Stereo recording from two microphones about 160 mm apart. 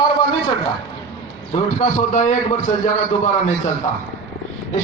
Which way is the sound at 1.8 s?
50° left (ahead or behind).